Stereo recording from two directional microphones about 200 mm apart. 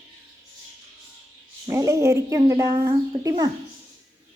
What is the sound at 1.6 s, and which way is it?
A woman's voice, 15° right (ahead or behind).